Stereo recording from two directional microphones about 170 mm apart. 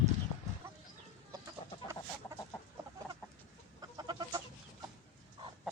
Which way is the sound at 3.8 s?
25° right (ahead or behind).